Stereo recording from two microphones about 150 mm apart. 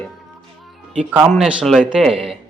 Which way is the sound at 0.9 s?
5° right (ahead or behind).